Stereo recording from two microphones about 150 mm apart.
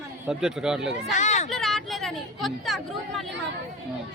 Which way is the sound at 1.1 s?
50° left (ahead or behind).